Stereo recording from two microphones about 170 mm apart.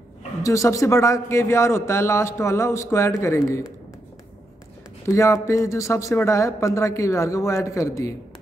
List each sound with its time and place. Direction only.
0.4 s a man's voice: 20° left (ahead or behind)
5.0 s a man's voice: 15° left (ahead or behind)